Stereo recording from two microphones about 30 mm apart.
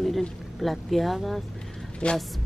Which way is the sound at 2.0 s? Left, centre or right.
Left.